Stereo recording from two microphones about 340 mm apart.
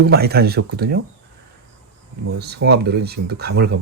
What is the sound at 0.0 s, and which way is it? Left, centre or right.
Speech, right.